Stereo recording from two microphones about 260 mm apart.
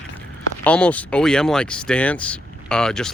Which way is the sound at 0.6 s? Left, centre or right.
Centre.